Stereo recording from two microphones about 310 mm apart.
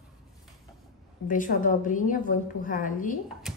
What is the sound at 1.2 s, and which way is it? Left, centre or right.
A woman's voice, left.